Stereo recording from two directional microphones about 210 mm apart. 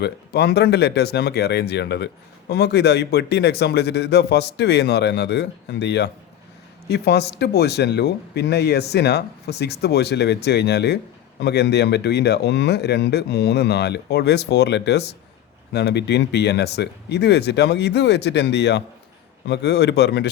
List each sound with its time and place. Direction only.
0.0 s speech: 50° left (ahead or behind)